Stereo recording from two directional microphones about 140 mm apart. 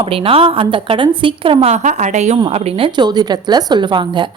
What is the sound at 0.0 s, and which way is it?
A woman's voice, 40° right (ahead or behind).